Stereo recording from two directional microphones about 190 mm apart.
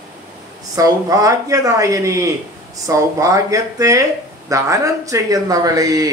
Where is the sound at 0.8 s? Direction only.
20° right (ahead or behind).